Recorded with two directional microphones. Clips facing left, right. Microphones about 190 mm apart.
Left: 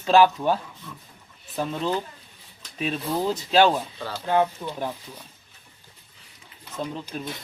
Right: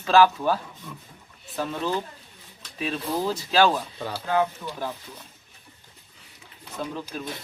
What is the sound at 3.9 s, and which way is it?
Speech, 10° right (ahead or behind).